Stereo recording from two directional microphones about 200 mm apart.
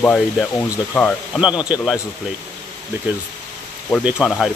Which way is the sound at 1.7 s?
5° right (ahead or behind).